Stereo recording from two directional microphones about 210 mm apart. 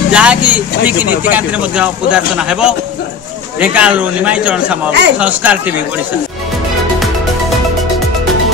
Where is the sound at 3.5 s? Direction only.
5° right (ahead or behind).